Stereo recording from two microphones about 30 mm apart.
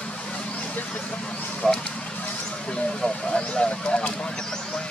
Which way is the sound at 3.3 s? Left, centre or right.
Left.